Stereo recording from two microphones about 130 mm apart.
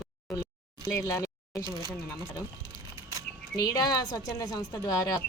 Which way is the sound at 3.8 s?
30° left (ahead or behind).